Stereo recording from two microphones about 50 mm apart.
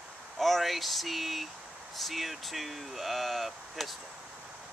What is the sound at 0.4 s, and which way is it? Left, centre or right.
Speech, centre.